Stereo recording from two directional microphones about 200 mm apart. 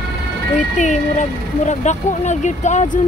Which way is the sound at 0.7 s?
35° left (ahead or behind).